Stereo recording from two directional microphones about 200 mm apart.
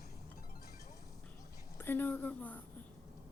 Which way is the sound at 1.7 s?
10° left (ahead or behind).